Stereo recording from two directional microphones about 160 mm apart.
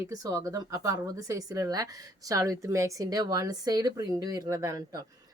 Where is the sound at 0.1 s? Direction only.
20° right (ahead or behind).